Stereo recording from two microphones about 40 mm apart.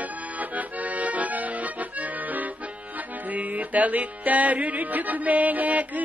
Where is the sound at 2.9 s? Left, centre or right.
Right.